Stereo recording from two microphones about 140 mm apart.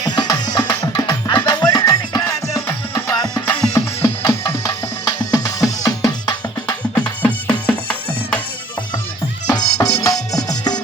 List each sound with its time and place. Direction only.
0.0 s music: 25° left (ahead or behind)
6.7 s music: 10° left (ahead or behind)
9.5 s music: 25° left (ahead or behind)